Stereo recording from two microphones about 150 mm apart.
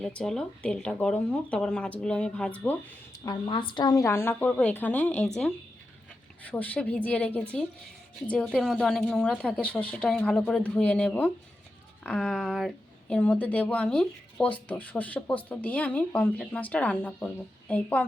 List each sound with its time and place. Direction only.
0.0 s speech: 5° left (ahead or behind)
3.2 s speech: 35° left (ahead or behind); by 5.3 s 10° left (ahead or behind)
6.4 s a woman's voice: 10° left (ahead or behind)